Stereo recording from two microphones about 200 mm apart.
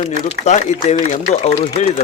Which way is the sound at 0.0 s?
35° left (ahead or behind).